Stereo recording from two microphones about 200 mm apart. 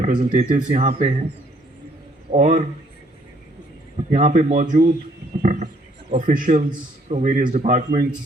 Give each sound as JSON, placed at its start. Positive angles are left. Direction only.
{"t": 0.0, "sound": "a man's voice", "side_deg": -40}
{"t": 2.3, "sound": "a man's voice", "side_deg": -35}
{"t": 4.1, "sound": "a man's voice", "side_deg": -35}